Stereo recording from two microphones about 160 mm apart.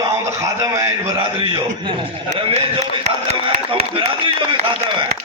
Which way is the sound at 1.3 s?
30° right (ahead or behind).